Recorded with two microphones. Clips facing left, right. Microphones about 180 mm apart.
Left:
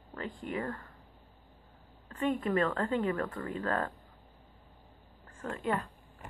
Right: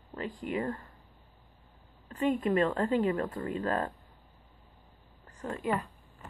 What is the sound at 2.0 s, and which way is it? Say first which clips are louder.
A woman's voice: right 3 dB; 20° right (ahead or behind).